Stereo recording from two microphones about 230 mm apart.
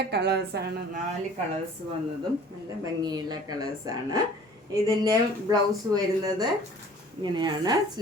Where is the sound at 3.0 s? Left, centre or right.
Centre.